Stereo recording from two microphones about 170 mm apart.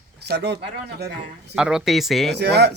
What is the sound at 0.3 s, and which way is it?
Speech, 75° right (ahead or behind).